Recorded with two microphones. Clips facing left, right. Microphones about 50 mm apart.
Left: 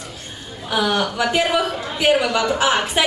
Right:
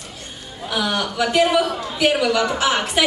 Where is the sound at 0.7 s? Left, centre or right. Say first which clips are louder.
Left 2 dB; centre.